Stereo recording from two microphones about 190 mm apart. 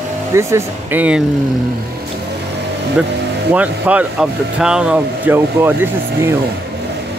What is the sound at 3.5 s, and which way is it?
Speech, 10° right (ahead or behind).